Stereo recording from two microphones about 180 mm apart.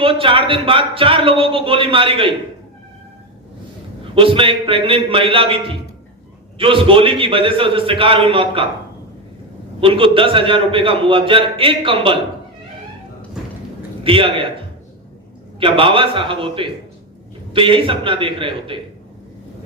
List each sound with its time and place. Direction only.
0.0 s a man's voice: 30° right (ahead or behind)
4.1 s a man's voice: 30° right (ahead or behind)
9.8 s a man's voice: 30° right (ahead or behind)
13.4 s clip-clop: 5° right (ahead or behind)
14.0 s a man's voice: 30° right (ahead or behind)
15.6 s a man's voice: 30° right (ahead or behind)